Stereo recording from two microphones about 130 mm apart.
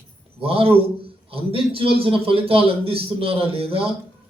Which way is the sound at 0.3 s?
45° right (ahead or behind).